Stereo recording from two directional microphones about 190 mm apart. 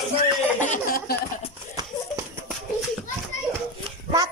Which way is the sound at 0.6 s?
45° left (ahead or behind).